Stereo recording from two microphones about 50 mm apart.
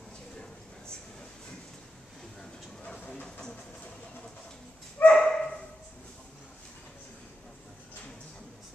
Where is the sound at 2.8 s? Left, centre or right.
Left.